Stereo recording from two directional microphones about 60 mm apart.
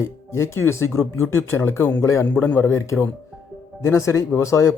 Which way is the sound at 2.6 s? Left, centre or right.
Left.